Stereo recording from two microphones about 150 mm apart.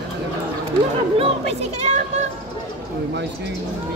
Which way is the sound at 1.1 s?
45° right (ahead or behind).